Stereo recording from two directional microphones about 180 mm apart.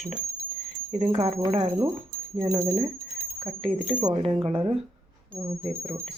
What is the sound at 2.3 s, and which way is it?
Speech, 20° right (ahead or behind).